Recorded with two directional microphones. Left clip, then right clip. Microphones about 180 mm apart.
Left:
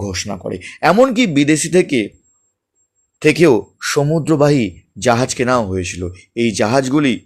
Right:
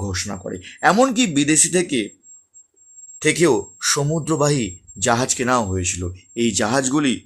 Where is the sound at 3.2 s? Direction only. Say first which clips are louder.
Left 5 dB; 15° left (ahead or behind).